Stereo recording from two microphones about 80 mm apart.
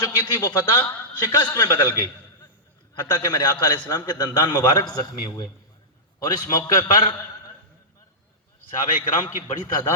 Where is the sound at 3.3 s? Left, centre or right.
Left.